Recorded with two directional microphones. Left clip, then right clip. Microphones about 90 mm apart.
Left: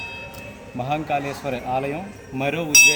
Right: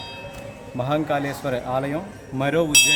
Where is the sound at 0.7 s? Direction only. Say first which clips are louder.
Right 1 dB; 30° right (ahead or behind).